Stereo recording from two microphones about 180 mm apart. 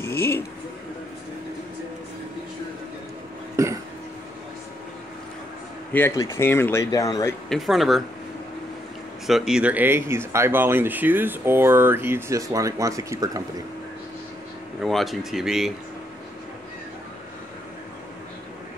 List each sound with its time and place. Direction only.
0.0 s a sound: 15° left (ahead or behind)
3.5 s a sound: 15° right (ahead or behind)
5.9 s speech: 15° left (ahead or behind)
7.4 s speech: centre (ahead or behind)
9.2 s speech: centre (ahead or behind); by 13.4 s 20° right (ahead or behind)
14.8 s speech: centre (ahead or behind)